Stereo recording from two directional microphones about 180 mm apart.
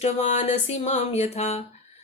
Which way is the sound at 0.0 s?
40° left (ahead or behind).